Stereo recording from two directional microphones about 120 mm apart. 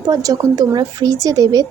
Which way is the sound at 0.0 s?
30° right (ahead or behind).